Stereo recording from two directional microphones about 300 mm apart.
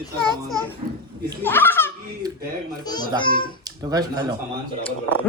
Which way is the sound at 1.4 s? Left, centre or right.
Centre.